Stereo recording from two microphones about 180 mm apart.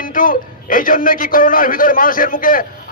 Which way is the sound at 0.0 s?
50° left (ahead or behind).